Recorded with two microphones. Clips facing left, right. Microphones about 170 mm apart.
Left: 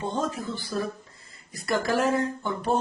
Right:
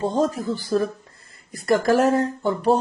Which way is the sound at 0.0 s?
35° right (ahead or behind).